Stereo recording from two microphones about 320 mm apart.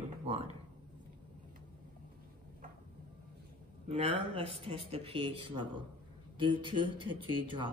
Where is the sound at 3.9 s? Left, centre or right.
Centre.